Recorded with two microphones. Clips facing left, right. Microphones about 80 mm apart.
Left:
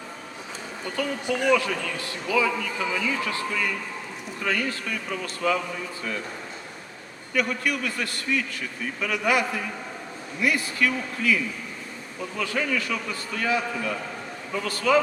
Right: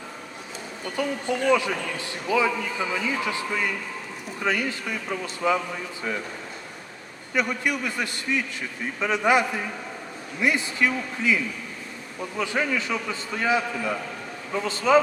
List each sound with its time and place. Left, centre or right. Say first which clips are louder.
1.5 s a man's voice: even; centre
7.3 s a man's voice: even; centre
12.4 s a man's voice: right 1 dB; right